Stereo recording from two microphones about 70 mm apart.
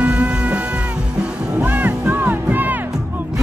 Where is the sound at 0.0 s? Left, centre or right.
Centre.